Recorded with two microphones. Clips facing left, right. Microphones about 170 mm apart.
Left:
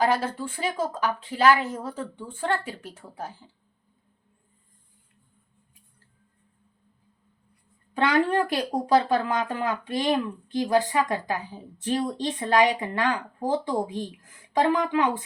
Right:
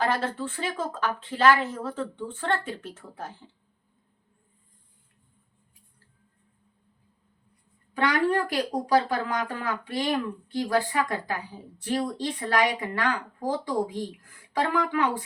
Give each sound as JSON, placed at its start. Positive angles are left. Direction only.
{"t": 0.0, "sound": "a woman's voice", "side_deg": 15}
{"t": 7.9, "sound": "speech", "side_deg": 20}